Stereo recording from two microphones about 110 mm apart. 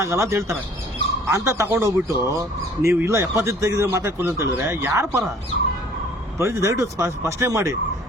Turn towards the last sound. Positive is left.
turn(degrees=-30)  # may be behind; listen again after turning